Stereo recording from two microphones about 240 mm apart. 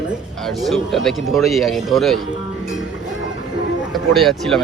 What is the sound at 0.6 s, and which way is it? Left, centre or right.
Speech, centre.